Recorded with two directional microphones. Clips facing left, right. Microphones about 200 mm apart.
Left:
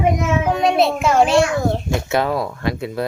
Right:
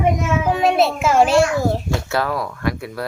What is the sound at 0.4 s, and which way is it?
A child's voice, centre (ahead or behind).